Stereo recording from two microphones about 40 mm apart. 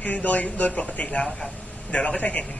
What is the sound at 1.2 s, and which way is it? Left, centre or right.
A man's voice, left.